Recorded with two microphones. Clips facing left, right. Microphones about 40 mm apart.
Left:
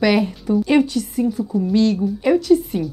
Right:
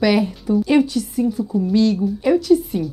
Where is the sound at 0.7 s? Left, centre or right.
Left.